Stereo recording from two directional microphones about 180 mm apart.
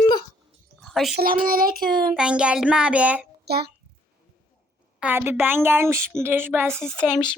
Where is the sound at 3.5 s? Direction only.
65° right (ahead or behind).